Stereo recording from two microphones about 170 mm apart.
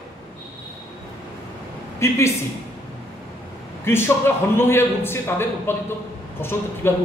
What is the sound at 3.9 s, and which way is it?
A man's voice, 15° left (ahead or behind).